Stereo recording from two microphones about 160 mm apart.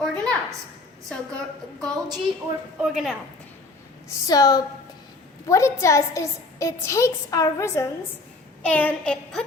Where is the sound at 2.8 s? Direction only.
Centre (ahead or behind).